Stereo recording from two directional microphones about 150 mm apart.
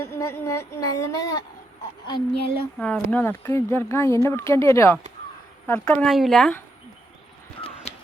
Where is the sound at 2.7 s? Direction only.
5° left (ahead or behind).